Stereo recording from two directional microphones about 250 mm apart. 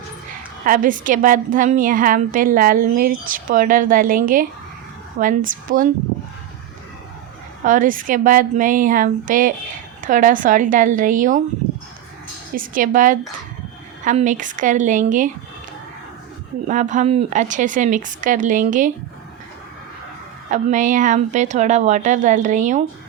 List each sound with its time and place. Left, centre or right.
0.6 s a woman's voice: right
7.6 s a woman's voice: right
12.5 s a woman's voice: right
16.6 s a woman's voice: right
20.5 s a woman's voice: right